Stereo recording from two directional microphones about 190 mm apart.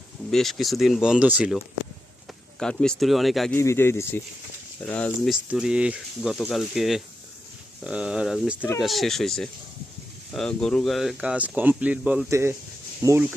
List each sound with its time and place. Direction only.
0.3 s speech: centre (ahead or behind)
2.6 s speech: 5° left (ahead or behind)
3.5 s speech: 15° left (ahead or behind); by 13.2 s 15° right (ahead or behind)